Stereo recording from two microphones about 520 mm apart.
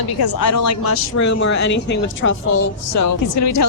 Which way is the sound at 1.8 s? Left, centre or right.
Left.